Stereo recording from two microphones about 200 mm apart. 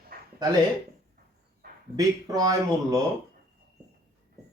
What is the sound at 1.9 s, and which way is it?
Speech, 20° right (ahead or behind).